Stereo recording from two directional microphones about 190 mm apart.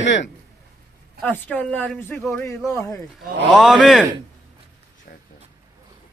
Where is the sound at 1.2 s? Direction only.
10° left (ahead or behind).